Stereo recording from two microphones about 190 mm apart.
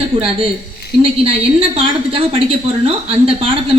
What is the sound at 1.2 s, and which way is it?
A woman's voice, 30° right (ahead or behind).